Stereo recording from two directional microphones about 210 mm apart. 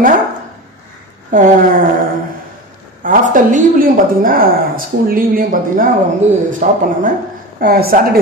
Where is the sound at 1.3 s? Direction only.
40° right (ahead or behind).